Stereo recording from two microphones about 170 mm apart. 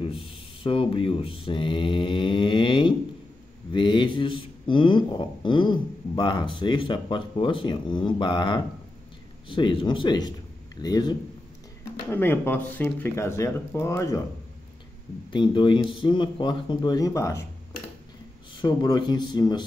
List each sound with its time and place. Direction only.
0.0 s a man's voice: 30° left (ahead or behind)
12.1 s speech: 10° left (ahead or behind)
15.3 s a man's voice: 30° left (ahead or behind)
18.5 s a man's voice: 25° left (ahead or behind)